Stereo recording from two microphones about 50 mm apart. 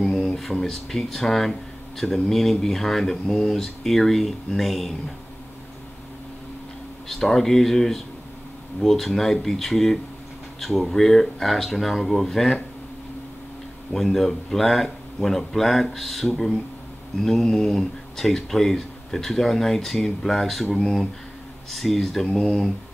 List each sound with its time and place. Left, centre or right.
0.0 s mantra: centre
0.4 s speech: centre
7.1 s speech: centre
13.9 s speech: centre